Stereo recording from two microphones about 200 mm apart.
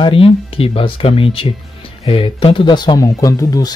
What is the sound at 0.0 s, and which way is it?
Speech, 25° left (ahead or behind).